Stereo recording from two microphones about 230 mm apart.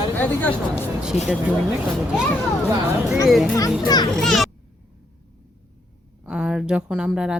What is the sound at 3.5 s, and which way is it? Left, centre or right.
Speech, centre.